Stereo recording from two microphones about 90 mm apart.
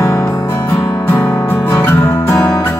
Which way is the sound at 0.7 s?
20° left (ahead or behind).